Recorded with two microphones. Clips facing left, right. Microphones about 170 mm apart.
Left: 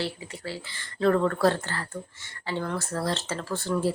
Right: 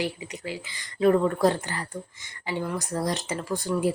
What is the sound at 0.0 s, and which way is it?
A woman's voice, 15° right (ahead or behind).